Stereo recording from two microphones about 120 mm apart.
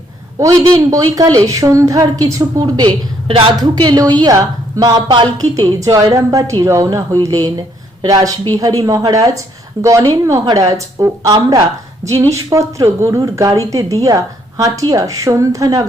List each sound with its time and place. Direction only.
0.3 s speech: 30° right (ahead or behind)
3.2 s a woman's voice: 50° right (ahead or behind)
3.6 s a woman's voice: 35° right (ahead or behind)